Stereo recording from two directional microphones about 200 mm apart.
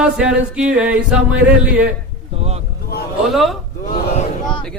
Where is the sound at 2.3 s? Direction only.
30° right (ahead or behind).